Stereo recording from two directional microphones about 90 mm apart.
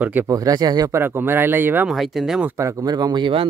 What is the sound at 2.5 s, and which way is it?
Speech, 40° right (ahead or behind).